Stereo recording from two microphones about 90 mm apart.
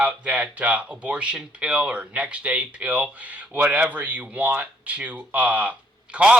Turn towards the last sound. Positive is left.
turn(degrees=-10)  # may be behind; listen again after turning